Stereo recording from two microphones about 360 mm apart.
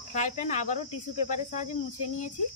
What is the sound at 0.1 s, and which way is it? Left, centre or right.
Speech, centre.